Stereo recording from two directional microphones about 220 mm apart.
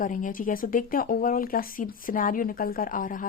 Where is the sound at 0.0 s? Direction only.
35° left (ahead or behind).